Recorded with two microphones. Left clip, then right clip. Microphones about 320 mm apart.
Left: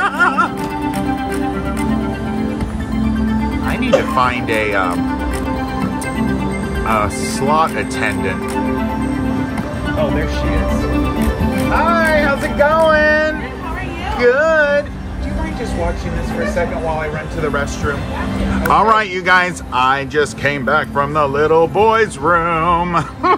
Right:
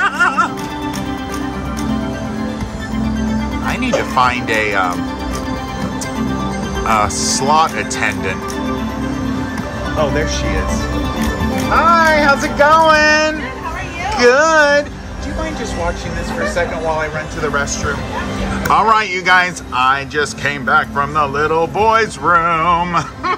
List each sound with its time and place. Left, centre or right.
0.0 s music: centre
4.2 s speech: centre
7.3 s speech: centre
11.7 s speech: centre
17.5 s speech: centre